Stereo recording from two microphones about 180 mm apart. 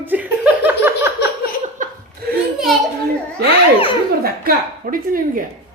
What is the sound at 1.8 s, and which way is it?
Laughter, 45° right (ahead or behind).